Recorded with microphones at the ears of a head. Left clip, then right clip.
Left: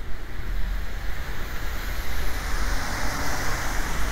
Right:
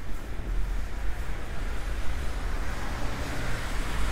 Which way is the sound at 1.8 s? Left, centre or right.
Left.